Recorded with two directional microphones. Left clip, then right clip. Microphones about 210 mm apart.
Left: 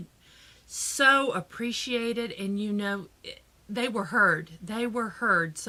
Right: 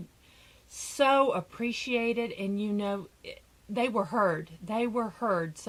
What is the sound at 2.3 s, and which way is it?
Speech, 15° left (ahead or behind).